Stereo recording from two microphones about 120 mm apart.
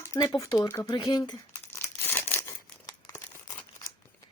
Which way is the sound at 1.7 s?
20° left (ahead or behind).